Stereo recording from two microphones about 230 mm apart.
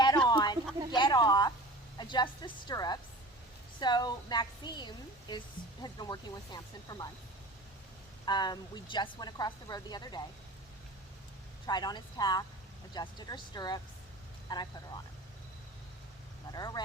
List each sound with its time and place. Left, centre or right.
0.3 s a sound: centre
2.0 s a woman's voice: centre
8.2 s a woman's voice: centre
11.6 s a woman's voice: centre
16.5 s a woman's voice: centre